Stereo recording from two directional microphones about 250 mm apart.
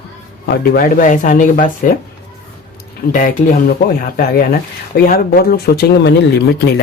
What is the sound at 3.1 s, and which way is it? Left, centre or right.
Speech, left.